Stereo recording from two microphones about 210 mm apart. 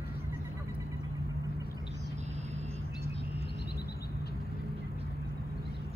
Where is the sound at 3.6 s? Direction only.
50° left (ahead or behind).